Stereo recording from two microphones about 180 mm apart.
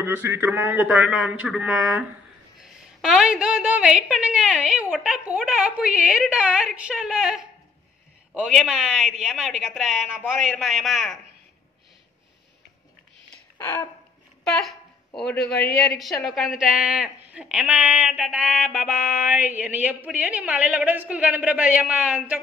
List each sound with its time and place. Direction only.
0.0 s a woman's voice: 10° right (ahead or behind)
13.6 s a sound: 15° left (ahead or behind)
14.4 s a woman's voice: centre (ahead or behind)